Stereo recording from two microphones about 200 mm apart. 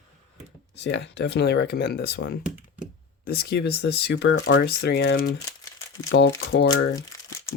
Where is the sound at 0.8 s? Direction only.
60° left (ahead or behind).